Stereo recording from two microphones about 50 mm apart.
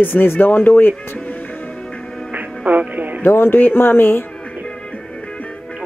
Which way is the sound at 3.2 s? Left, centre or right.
Left.